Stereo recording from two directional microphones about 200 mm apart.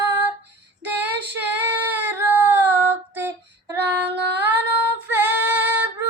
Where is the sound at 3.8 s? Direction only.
55° right (ahead or behind).